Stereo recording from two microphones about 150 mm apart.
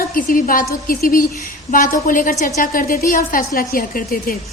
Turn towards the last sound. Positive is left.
turn(degrees=75)  # may be behind; listen again after turning